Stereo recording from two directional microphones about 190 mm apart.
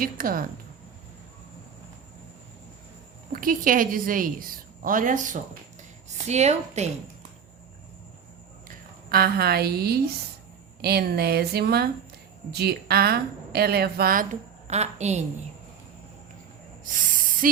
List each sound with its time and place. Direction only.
0.0 s a woman's voice: 50° right (ahead or behind)
3.3 s a woman's voice: 45° right (ahead or behind)
8.6 s a woman's voice: 55° right (ahead or behind)
14.7 s a woman's voice: 35° right (ahead or behind)
16.8 s a sound: 45° right (ahead or behind)